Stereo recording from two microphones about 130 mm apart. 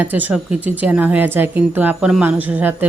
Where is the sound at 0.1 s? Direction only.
15° right (ahead or behind).